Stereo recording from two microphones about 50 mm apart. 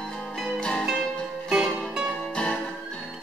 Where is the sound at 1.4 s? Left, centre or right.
Centre.